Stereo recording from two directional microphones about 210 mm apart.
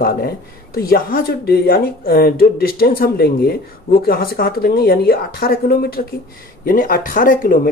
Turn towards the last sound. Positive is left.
turn(degrees=40)  # may be behind; listen again after turning